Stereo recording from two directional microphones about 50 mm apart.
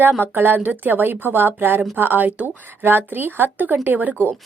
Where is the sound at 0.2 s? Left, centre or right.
Right.